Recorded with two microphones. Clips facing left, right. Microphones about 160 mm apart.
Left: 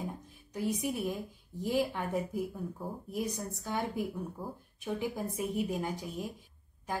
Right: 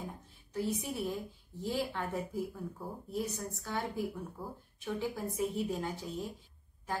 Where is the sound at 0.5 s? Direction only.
15° left (ahead or behind).